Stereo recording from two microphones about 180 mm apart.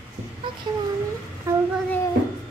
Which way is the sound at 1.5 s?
15° right (ahead or behind).